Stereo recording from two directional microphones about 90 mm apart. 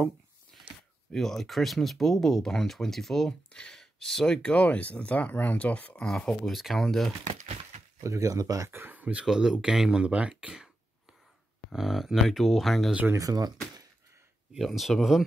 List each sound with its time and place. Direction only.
1.1 s speech: 5° left (ahead or behind)
8.0 s speech: 35° right (ahead or behind)
8.6 s speech: 25° right (ahead or behind)
11.7 s speech: 5° right (ahead or behind)
13.1 s speech: 40° right (ahead or behind)
14.5 s speech: centre (ahead or behind)